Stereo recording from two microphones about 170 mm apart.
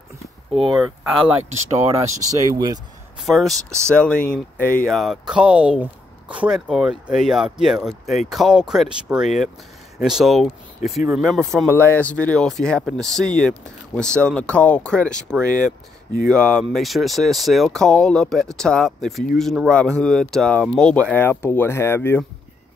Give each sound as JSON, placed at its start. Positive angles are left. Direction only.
{"t": 0.7, "sound": "speech", "side_deg": -5}
{"t": 2.2, "sound": "speech", "side_deg": -20}
{"t": 3.3, "sound": "speech", "side_deg": 0}
{"t": 3.5, "sound": "speech", "side_deg": -15}
{"t": 3.9, "sound": "speech", "side_deg": 5}